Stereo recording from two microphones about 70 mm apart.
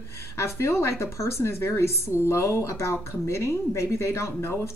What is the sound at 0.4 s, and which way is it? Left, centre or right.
A woman's voice, left.